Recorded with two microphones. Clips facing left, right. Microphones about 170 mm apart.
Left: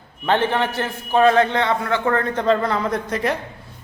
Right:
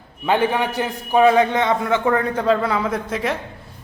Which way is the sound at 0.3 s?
10° right (ahead or behind).